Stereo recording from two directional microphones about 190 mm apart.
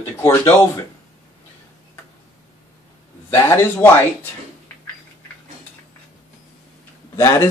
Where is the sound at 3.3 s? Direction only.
15° left (ahead or behind).